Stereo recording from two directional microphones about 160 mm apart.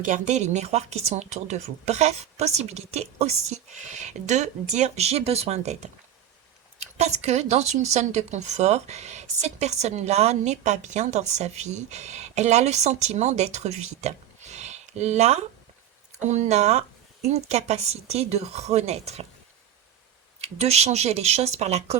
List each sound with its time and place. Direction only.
0.0 s speech: 50° right (ahead or behind)
14.5 s a sound: 45° right (ahead or behind)
16.1 s speech: 45° right (ahead or behind)
20.4 s speech: 40° right (ahead or behind)